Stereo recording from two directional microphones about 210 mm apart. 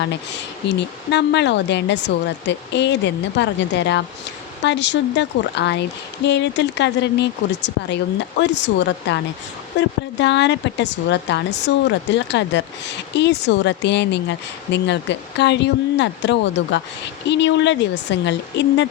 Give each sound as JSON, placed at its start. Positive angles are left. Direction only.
{"t": 0.0, "sound": "speech", "side_deg": 55}